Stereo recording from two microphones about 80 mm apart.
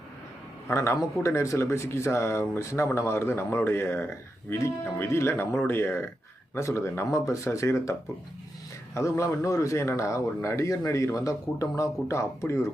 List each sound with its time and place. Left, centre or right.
0.7 s speech: left
9.0 s speech: left